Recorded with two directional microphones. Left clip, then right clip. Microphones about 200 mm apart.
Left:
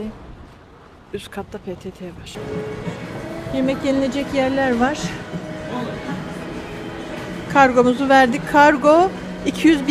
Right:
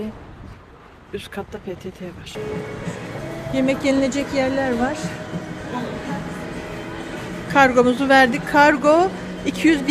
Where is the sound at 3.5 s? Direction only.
5° right (ahead or behind).